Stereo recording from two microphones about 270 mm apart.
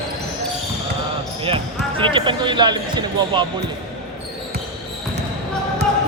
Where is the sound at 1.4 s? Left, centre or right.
Centre.